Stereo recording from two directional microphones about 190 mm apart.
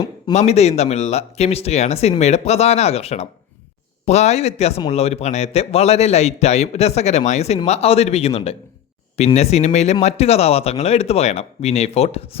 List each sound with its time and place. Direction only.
0.3 s a man's voice: 35° left (ahead or behind)